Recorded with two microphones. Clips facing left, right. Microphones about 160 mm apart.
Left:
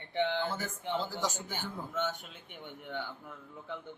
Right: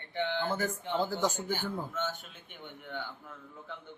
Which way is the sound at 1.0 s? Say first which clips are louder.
Right 5 dB; 55° right (ahead or behind).